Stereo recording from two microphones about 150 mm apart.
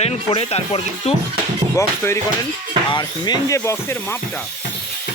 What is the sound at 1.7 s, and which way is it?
Speech, 20° left (ahead or behind).